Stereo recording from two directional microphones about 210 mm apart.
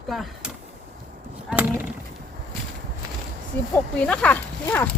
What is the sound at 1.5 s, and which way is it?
Speech, 5° right (ahead or behind).